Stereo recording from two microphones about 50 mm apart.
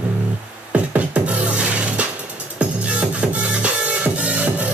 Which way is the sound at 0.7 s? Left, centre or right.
Right.